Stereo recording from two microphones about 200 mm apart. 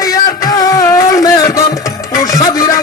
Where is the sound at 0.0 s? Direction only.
20° left (ahead or behind).